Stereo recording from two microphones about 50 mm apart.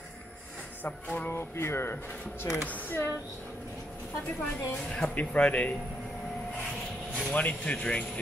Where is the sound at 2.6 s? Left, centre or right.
Left.